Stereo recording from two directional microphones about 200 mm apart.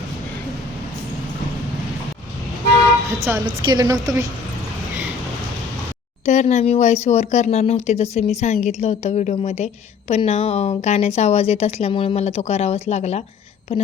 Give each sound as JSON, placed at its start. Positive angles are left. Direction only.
{"t": 3.2, "sound": "a woman's voice", "side_deg": -15}
{"t": 6.2, "sound": "speech", "side_deg": 35}